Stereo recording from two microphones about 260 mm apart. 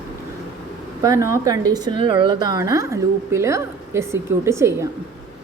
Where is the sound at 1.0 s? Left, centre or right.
Centre.